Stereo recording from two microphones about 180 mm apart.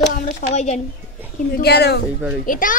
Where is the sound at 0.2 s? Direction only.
40° left (ahead or behind).